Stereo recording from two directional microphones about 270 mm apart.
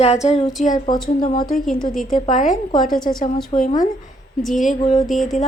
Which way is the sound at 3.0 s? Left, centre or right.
Centre.